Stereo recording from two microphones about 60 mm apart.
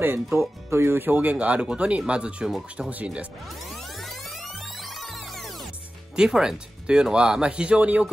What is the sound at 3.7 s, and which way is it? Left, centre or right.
Music, centre.